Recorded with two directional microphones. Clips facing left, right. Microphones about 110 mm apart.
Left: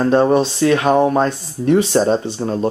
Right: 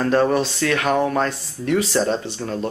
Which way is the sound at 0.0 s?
25° left (ahead or behind).